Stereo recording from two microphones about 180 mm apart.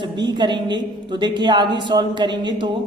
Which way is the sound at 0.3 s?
25° right (ahead or behind).